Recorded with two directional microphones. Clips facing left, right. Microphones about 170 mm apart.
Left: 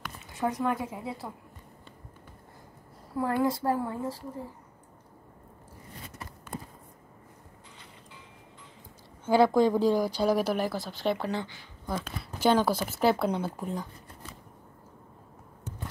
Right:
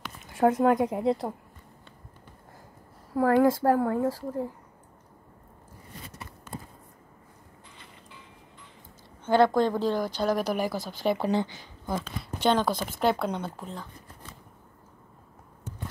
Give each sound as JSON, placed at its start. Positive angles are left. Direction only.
{"t": 0.4, "sound": "speech", "side_deg": -50}
{"t": 0.8, "sound": "a woman's voice", "side_deg": -75}
{"t": 3.2, "sound": "speech", "side_deg": -45}
{"t": 9.2, "sound": "speech", "side_deg": 5}
{"t": 11.2, "sound": "speech", "side_deg": -20}
{"t": 12.0, "sound": "speech", "side_deg": 5}